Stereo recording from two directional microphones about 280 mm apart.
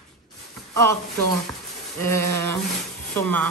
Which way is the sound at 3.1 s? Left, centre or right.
Right.